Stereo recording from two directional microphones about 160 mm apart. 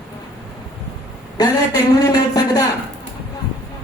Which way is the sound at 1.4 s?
25° left (ahead or behind).